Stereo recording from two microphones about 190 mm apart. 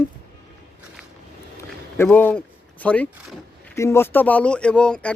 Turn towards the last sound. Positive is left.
turn(degrees=5)  # may be behind; listen again after turning